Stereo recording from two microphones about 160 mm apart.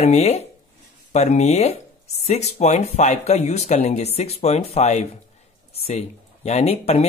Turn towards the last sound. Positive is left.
turn(degrees=40)  # may be behind; listen again after turning